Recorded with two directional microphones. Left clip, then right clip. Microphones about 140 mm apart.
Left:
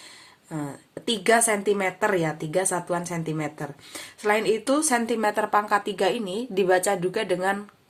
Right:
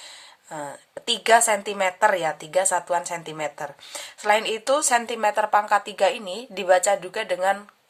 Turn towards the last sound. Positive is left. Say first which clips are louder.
# right 1 dB
turn(degrees=-15)  # may be behind; listen again after turning